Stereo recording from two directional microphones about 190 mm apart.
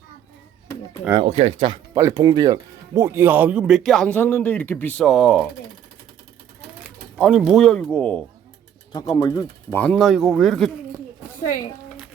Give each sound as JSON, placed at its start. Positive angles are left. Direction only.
{"t": 1.2, "sound": "speech", "side_deg": -30}
{"t": 5.0, "sound": "speech", "side_deg": -5}
{"t": 7.2, "sound": "speech", "side_deg": 0}
{"t": 8.9, "sound": "speech", "side_deg": 20}
{"t": 11.3, "sound": "a woman's voice", "side_deg": 45}